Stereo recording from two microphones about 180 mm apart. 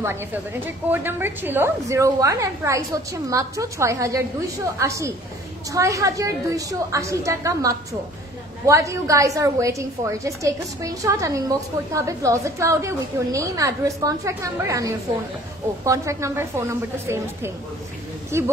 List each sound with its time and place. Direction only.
0.0 s a woman's voice: 15° right (ahead or behind)